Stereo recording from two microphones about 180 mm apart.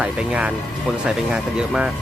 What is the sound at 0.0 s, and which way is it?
Speech, 5° right (ahead or behind).